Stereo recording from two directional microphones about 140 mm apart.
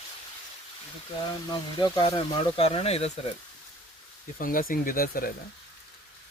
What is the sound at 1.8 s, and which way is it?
Speech, 30° left (ahead or behind).